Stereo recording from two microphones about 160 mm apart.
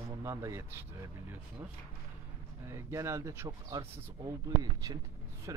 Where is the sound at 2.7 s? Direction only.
15° right (ahead or behind).